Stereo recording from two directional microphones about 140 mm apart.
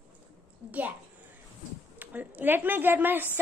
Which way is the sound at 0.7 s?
10° right (ahead or behind).